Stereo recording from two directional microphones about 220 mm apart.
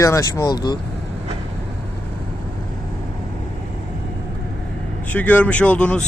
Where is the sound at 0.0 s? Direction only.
15° left (ahead or behind).